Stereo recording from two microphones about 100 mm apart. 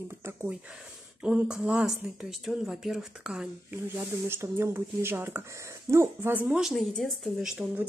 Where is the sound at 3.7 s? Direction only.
25° right (ahead or behind).